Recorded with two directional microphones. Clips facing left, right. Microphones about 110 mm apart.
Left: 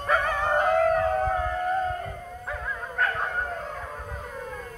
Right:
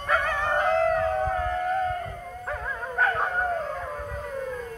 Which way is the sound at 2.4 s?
5° right (ahead or behind).